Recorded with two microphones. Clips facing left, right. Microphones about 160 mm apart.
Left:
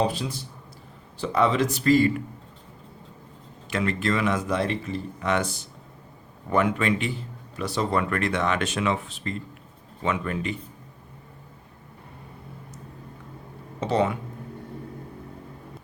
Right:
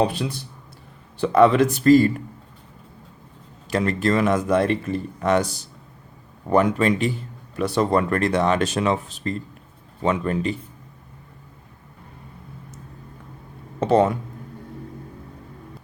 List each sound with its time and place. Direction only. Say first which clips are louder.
0.0 s speech: right 3 dB; 60° right (ahead or behind); by 2.2 s 40° right (ahead or behind)
3.7 s speech: right 4 dB; 40° right (ahead or behind)
7.5 s speech: right 6 dB; 55° right (ahead or behind); by 10.5 s 35° right (ahead or behind)
13.7 s speech: right 6 dB; 50° right (ahead or behind)